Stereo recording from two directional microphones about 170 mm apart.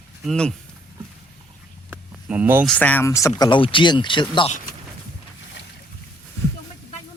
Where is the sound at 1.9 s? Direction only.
5° right (ahead or behind).